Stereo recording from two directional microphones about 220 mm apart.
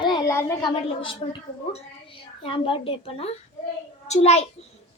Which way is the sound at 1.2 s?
25° left (ahead or behind).